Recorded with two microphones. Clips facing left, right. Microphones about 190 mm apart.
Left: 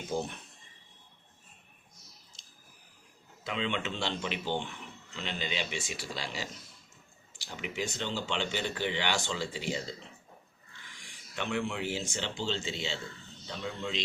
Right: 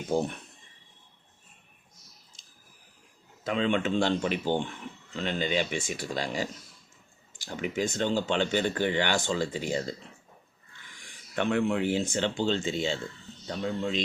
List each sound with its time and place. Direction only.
3.4 s speech: 45° right (ahead or behind)
11.0 s speech: 55° right (ahead or behind)